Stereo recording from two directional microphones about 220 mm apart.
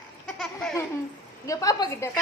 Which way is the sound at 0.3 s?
Centre (ahead or behind).